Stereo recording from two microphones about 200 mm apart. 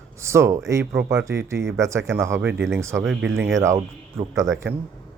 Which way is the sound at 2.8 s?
15° right (ahead or behind).